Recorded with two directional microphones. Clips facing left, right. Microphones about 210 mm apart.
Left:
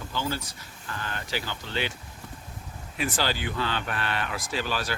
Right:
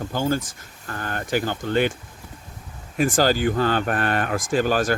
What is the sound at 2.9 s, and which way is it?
Speech, 45° right (ahead or behind).